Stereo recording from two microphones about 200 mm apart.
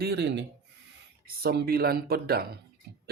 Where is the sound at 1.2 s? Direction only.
50° right (ahead or behind).